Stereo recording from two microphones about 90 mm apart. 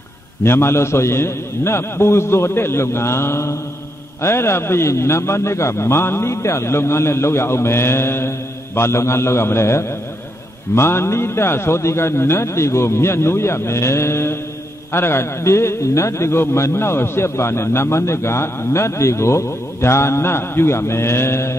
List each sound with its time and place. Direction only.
0.4 s a man's voice: 25° left (ahead or behind)